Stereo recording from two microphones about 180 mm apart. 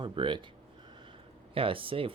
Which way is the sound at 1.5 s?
30° right (ahead or behind).